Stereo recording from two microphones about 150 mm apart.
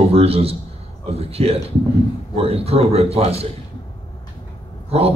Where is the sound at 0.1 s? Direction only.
40° right (ahead or behind).